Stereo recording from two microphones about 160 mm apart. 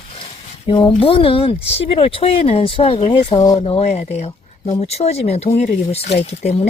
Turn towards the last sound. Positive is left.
turn(degrees=40)  # may be behind; listen again after turning